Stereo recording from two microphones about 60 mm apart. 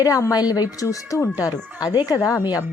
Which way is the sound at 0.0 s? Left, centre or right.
Left.